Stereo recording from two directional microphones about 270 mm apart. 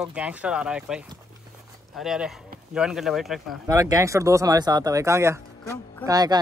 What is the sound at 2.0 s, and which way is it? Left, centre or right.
Speech, centre.